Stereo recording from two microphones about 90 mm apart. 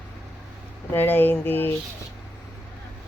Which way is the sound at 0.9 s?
25° left (ahead or behind).